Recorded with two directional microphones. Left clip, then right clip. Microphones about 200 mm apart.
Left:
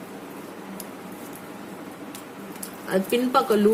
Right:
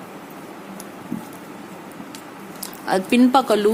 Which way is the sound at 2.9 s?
50° right (ahead or behind).